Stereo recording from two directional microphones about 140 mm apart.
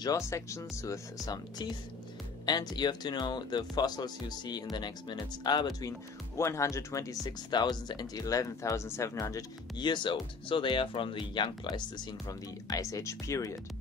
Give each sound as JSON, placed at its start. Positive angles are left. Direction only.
{"t": 0.0, "sound": "speech", "side_deg": 25}